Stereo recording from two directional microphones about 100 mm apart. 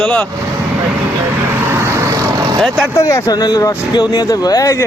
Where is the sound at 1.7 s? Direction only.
30° right (ahead or behind).